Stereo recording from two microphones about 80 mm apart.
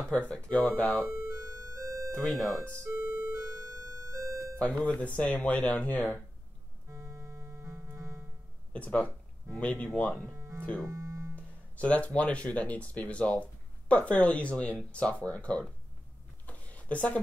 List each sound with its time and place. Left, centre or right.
0.1 s speech: centre
1.3 s music: right
2.1 s speech: centre
2.6 s speech: right
3.1 s music: right
4.6 s speech: centre
6.9 s music: right
8.7 s speech: centre
10.3 s music: right
11.3 s speech: centre
16.4 s a sound: centre